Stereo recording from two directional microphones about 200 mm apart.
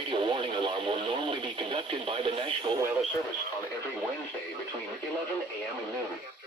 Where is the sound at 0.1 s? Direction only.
25° right (ahead or behind).